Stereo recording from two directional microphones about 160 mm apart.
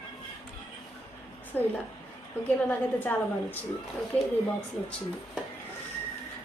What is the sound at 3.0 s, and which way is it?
Speech, 10° left (ahead or behind).